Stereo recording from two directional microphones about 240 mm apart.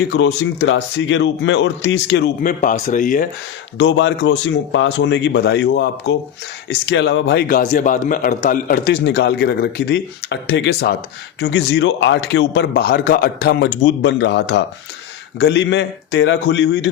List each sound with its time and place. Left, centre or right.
0.1 s speech: left
2.4 s a man's voice: left
3.8 s a man's voice: left